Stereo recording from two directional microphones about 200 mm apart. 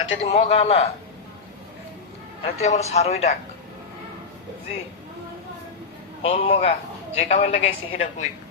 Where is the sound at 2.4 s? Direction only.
35° left (ahead or behind).